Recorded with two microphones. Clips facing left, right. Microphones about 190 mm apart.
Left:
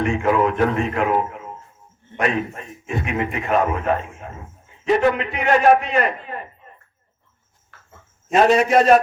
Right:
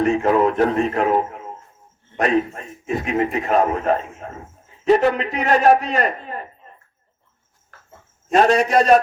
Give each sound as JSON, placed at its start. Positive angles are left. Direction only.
{"t": 0.0, "sound": "a man's voice", "side_deg": -40}
{"t": 7.7, "sound": "a sound", "side_deg": -45}
{"t": 8.3, "sound": "a man's voice", "side_deg": 0}